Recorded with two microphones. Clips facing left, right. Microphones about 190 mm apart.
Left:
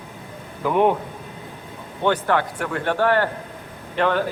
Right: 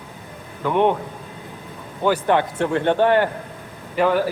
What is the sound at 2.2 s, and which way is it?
Speech, 20° right (ahead or behind).